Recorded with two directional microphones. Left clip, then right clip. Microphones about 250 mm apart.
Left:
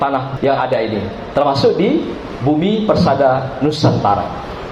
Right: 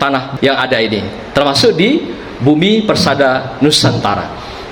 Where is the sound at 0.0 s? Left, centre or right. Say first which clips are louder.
Right 3 dB; right.